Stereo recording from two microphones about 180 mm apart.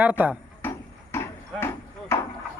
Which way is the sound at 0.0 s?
10° right (ahead or behind).